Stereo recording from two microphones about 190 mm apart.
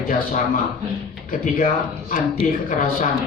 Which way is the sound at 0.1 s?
45° left (ahead or behind).